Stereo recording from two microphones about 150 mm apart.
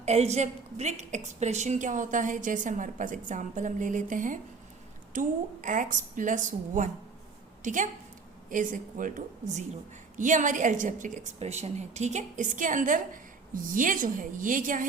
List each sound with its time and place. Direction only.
0.0 s a woman's voice: 45° right (ahead or behind); by 14.8 s 60° right (ahead or behind)